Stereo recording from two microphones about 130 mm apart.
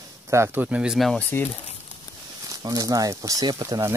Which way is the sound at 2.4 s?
30° right (ahead or behind).